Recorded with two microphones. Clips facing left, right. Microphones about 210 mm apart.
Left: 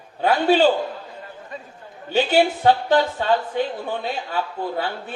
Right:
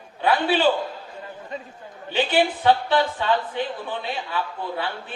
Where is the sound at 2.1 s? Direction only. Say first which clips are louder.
Left 3 dB; 45° left (ahead or behind).